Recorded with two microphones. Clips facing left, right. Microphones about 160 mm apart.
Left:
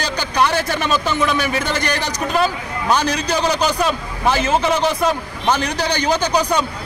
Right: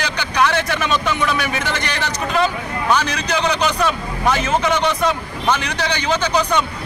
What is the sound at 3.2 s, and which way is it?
A man's voice, 30° left (ahead or behind).